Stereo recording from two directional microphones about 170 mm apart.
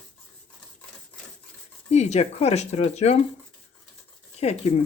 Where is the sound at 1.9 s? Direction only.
40° left (ahead or behind).